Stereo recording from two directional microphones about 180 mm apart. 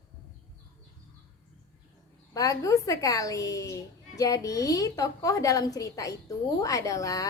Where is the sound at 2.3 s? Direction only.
20° left (ahead or behind).